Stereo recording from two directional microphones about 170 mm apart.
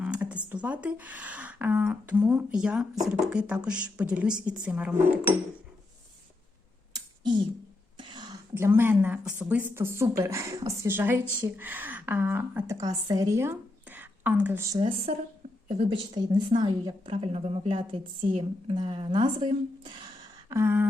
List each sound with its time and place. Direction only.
0.0 s speech: 5° right (ahead or behind)
7.9 s a woman's voice: 25° right (ahead or behind)
20.5 s speech: 15° right (ahead or behind)